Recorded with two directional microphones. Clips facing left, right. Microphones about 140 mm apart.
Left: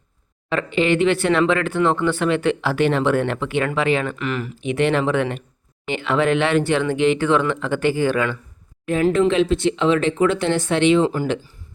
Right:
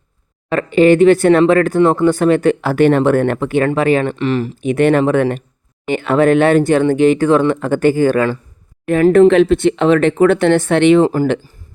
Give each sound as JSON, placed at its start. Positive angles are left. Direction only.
{"t": 0.5, "sound": "speech", "side_deg": -45}
{"t": 4.0, "sound": "speech", "side_deg": -30}
{"t": 4.7, "sound": "speech", "side_deg": -50}
{"t": 8.9, "sound": "speech", "side_deg": -55}